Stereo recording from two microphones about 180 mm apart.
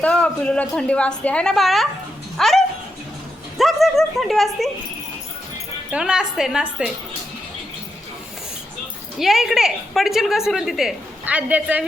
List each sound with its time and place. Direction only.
0.0 s a woman's voice: 5° left (ahead or behind)
3.6 s a woman's voice: centre (ahead or behind)
5.9 s a woman's voice: 5° right (ahead or behind)
9.1 s a woman's voice: centre (ahead or behind)